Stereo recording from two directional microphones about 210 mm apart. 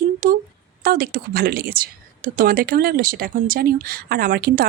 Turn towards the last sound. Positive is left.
turn(degrees=-45)  # may be behind; listen again after turning